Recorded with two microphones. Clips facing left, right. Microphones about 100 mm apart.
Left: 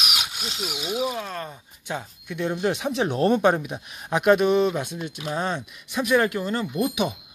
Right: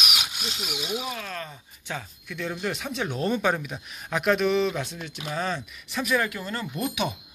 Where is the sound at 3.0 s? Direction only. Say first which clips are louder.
Left 6 dB; 50° left (ahead or behind).